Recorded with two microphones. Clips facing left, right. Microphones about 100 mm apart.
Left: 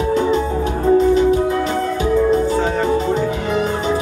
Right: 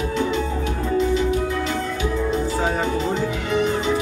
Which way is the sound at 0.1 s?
35° left (ahead or behind).